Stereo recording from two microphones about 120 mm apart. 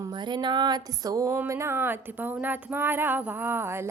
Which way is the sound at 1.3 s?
20° right (ahead or behind).